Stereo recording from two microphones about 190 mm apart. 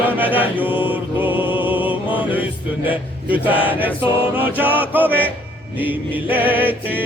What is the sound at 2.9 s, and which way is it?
Speech, 10° right (ahead or behind).